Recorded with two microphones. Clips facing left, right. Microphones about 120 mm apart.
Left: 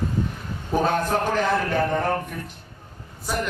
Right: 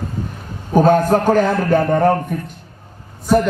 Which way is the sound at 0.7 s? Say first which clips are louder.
Right 9 dB; 45° right (ahead or behind).